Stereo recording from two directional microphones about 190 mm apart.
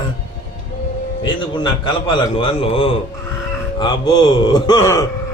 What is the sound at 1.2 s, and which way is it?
A man's voice, 25° left (ahead or behind).